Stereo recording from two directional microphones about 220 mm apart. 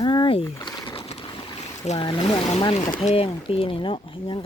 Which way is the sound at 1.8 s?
25° left (ahead or behind).